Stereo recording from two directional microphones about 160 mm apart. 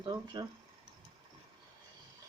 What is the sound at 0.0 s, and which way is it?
Speech, 30° right (ahead or behind).